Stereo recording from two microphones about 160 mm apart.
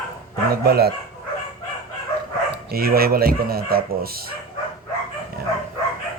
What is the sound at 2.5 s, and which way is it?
Speech, 70° right (ahead or behind).